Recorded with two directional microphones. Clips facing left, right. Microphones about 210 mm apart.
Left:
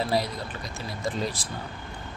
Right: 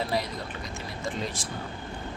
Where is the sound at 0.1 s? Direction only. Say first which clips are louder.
Left 3 dB; 35° left (ahead or behind).